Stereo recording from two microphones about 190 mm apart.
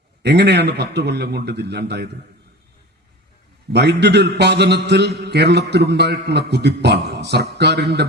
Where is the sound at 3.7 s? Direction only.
60° right (ahead or behind).